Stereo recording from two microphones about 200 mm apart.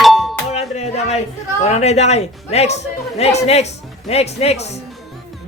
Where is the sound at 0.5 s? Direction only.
30° left (ahead or behind).